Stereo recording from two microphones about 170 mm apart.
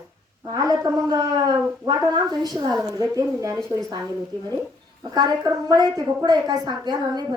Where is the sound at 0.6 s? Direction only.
20° right (ahead or behind).